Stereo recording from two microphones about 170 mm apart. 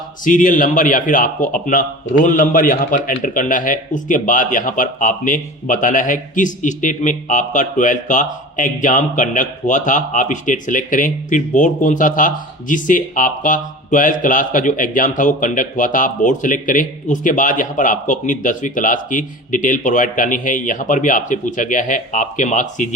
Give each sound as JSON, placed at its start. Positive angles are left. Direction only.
{"t": 0.3, "sound": "a man's voice", "side_deg": 50}